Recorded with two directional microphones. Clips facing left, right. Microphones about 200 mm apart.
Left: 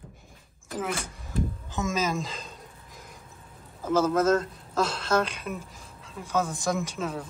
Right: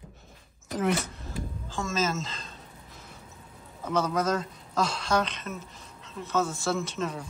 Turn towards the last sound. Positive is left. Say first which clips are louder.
# even
turn(degrees=5)  # may be behind; listen again after turning